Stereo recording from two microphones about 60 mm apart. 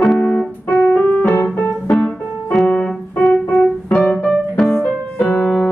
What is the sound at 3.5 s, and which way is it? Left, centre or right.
Piano, centre.